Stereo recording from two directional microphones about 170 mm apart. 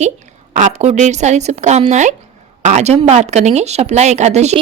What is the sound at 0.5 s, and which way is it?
Speech, 45° right (ahead or behind).